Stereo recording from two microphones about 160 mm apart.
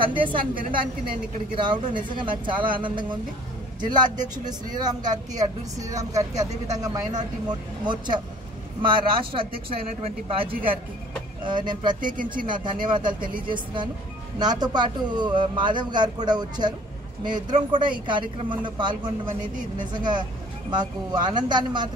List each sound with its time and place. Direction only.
0.0 s speech: 30° right (ahead or behind)
0.6 s a woman's voice: 60° right (ahead or behind)
1.6 s speech: 30° right (ahead or behind)
12.0 s a woman's voice: 60° right (ahead or behind)
12.4 s speech: 30° right (ahead or behind)
14.4 s speech: 25° right (ahead or behind)